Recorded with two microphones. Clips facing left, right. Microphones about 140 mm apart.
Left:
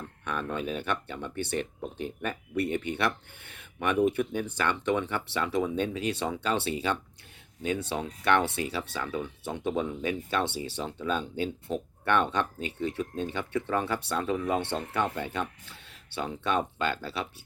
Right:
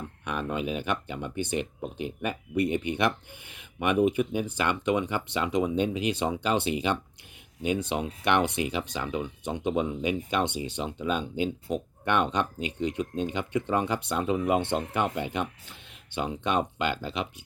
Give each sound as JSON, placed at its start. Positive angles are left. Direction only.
{"t": 0.3, "sound": "speech", "side_deg": -15}